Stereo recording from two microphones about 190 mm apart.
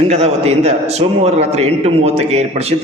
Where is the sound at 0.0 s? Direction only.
35° right (ahead or behind).